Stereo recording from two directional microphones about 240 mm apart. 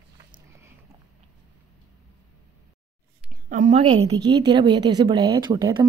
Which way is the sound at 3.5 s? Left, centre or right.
Right.